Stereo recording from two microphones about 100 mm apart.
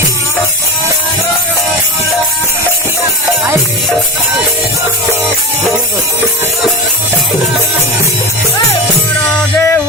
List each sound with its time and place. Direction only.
9.6 s music: 25° left (ahead or behind)